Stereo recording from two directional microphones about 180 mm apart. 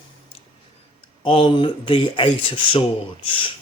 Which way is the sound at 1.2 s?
30° left (ahead or behind).